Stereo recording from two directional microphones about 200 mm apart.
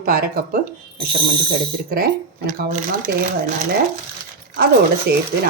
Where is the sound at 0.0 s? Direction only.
45° right (ahead or behind).